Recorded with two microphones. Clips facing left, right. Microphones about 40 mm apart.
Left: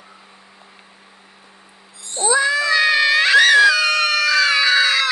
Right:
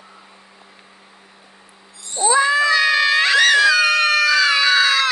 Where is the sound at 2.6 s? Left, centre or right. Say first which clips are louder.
Even; left.